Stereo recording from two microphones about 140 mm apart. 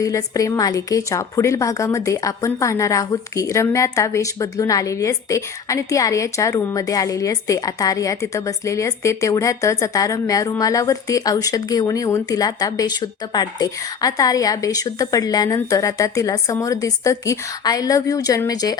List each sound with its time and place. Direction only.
0.0 s a woman's voice: 25° left (ahead or behind)